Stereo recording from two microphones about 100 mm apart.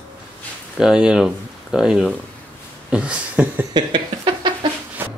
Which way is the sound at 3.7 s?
50° right (ahead or behind).